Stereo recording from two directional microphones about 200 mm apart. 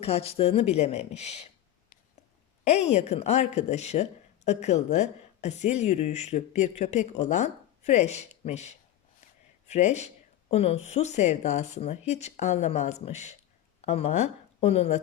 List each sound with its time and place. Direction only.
0.0 s a woman's voice: 30° left (ahead or behind)
2.6 s a woman's voice: 35° left (ahead or behind)